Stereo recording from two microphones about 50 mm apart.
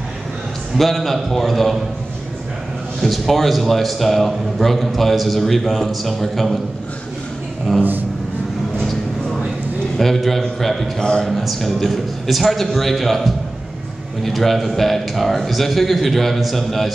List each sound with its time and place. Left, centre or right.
0.7 s a man's voice: centre
3.0 s a man's voice: centre
9.9 s a man's voice: centre
11.0 s speech: centre
11.2 s a man's voice: centre